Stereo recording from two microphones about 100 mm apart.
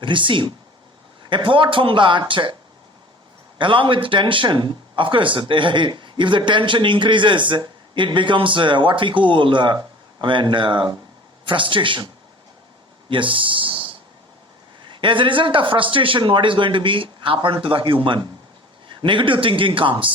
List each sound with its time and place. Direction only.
0.0 s a man's voice: 55° right (ahead or behind)
3.6 s a man's voice: 55° right (ahead or behind)
13.1 s a sound: 55° right (ahead or behind)
14.8 s a man's voice: 55° right (ahead or behind)